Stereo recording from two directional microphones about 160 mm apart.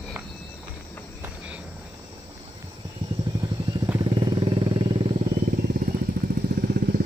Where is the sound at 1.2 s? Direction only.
10° right (ahead or behind).